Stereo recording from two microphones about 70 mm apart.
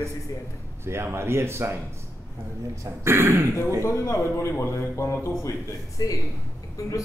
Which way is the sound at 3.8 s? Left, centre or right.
Left.